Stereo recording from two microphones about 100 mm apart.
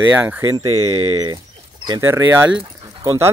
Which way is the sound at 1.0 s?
45° right (ahead or behind).